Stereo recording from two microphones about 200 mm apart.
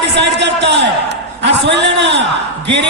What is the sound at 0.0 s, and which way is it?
A man's voice, 60° right (ahead or behind).